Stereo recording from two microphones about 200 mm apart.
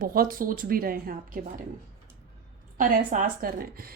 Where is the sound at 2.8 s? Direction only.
40° right (ahead or behind).